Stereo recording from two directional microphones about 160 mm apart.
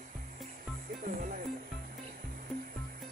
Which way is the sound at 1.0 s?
55° right (ahead or behind).